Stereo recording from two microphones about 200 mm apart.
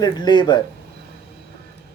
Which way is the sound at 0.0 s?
20° left (ahead or behind).